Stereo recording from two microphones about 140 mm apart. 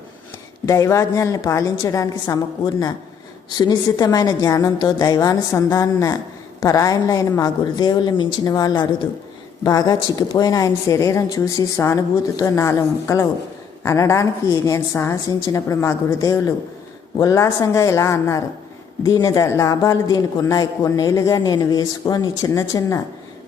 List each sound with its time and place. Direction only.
0.6 s a man's voice: 20° left (ahead or behind)